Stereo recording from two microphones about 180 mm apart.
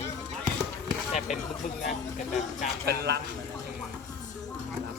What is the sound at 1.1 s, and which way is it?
Speech, centre (ahead or behind).